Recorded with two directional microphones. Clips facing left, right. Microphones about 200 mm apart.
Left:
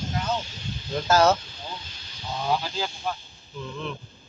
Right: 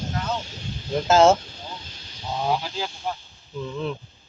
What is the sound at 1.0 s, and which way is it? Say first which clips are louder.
Speech: right 4 dB; 25° right (ahead or behind).